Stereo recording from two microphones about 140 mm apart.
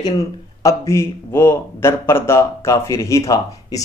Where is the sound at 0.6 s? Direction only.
20° left (ahead or behind).